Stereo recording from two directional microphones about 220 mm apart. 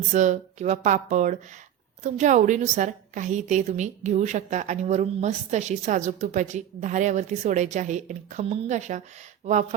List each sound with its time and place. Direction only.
0.1 s a woman's voice: 35° right (ahead or behind)